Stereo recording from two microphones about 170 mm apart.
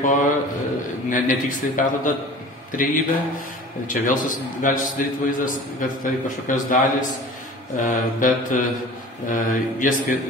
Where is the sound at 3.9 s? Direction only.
50° left (ahead or behind).